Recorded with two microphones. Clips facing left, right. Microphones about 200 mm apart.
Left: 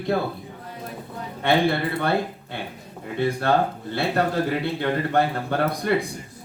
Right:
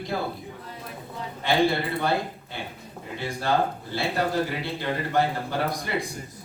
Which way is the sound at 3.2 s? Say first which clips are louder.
Left 8 dB; 60° left (ahead or behind).